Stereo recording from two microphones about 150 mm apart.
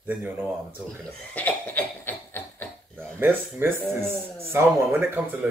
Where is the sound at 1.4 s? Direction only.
10° left (ahead or behind).